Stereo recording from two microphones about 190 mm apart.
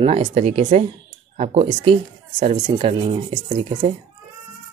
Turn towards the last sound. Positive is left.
turn(degrees=-30)  # may be behind; listen again after turning